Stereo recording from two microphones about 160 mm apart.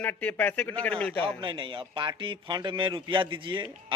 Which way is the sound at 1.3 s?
30° right (ahead or behind).